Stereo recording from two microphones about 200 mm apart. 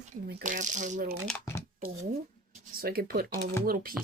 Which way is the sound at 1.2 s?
5° left (ahead or behind).